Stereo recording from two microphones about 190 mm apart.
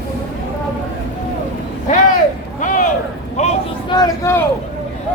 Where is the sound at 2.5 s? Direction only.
40° left (ahead or behind).